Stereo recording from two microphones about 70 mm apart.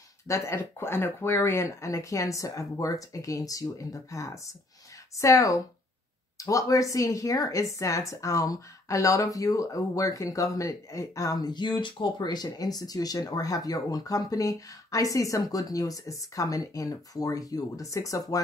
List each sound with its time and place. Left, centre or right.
0.3 s speech: left